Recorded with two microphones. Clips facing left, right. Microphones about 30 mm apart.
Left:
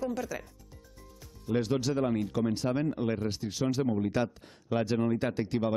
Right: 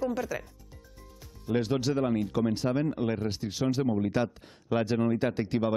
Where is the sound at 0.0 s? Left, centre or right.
Centre.